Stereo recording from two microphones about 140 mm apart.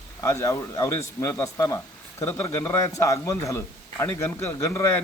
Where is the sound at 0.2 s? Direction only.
20° left (ahead or behind).